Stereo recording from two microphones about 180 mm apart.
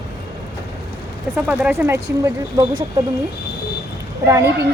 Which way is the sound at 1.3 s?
10° right (ahead or behind).